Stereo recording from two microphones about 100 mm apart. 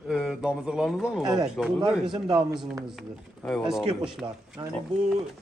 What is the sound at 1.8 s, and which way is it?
Speech, 50° right (ahead or behind).